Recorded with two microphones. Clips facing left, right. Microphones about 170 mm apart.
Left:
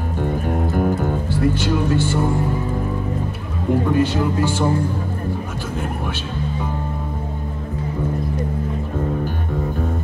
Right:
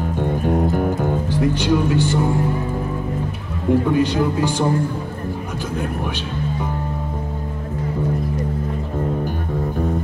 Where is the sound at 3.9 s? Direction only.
15° right (ahead or behind).